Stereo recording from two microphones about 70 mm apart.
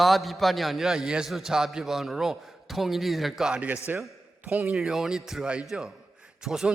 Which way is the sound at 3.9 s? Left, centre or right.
Right.